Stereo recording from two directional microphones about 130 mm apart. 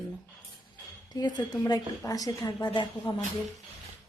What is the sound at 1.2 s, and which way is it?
A woman's voice, 35° left (ahead or behind).